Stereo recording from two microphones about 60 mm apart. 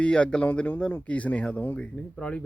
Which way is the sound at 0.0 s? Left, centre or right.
Centre.